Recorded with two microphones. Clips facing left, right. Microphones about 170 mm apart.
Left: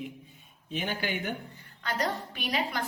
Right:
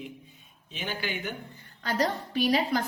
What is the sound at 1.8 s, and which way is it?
Speech, 35° right (ahead or behind).